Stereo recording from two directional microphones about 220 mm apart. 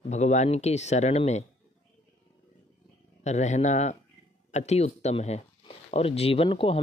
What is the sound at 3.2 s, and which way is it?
Speech, 30° left (ahead or behind).